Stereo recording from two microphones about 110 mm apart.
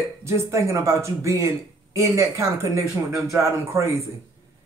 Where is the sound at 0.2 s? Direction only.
25° right (ahead or behind).